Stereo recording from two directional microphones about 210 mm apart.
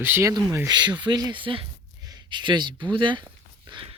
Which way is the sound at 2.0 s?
20° right (ahead or behind).